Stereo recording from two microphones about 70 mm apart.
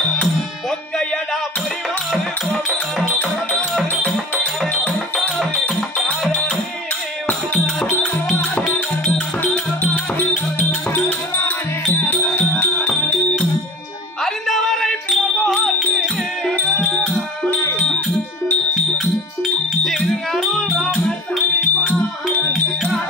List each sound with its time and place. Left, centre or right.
4.0 s music: centre
8.3 s music: centre
10.7 s music: left
14.2 s music: centre
19.4 s music: centre
20.9 s music: left